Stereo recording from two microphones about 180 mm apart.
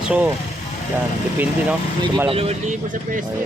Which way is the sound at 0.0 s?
5° right (ahead or behind).